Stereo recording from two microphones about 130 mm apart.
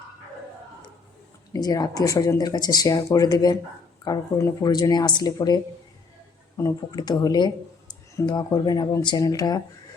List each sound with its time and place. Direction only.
1.5 s speech: 30° left (ahead or behind)
6.6 s speech: 30° left (ahead or behind)